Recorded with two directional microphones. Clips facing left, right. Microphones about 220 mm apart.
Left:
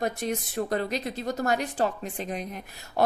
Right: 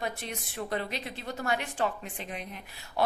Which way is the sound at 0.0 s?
45° left (ahead or behind).